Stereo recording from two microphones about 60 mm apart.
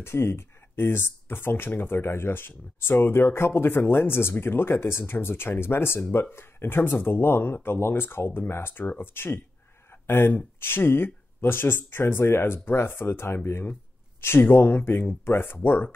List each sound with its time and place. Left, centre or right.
0.0 s speech: left